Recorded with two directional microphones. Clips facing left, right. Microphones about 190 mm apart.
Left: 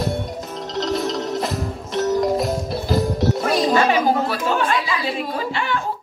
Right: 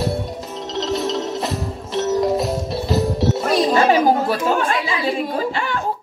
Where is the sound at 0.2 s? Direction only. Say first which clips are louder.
Even; centre (ahead or behind).